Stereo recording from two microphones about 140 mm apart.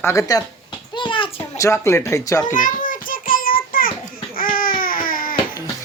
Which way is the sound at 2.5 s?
75° left (ahead or behind).